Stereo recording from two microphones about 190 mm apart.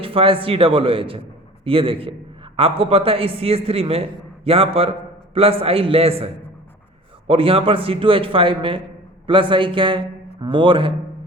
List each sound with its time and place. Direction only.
0.0 s a man's voice: 30° right (ahead or behind)
7.3 s a man's voice: 30° right (ahead or behind)